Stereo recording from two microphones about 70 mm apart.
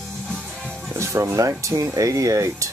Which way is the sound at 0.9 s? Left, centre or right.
Right.